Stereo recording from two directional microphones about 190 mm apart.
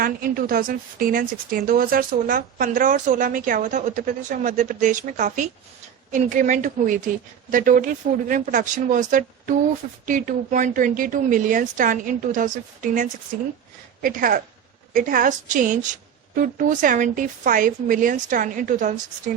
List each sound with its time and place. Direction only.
0.0 s a woman's voice: 50° right (ahead or behind)